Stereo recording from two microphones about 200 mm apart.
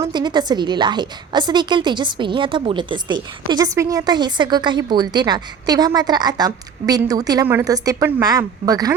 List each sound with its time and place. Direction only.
0.0 s a woman's voice: 20° right (ahead or behind)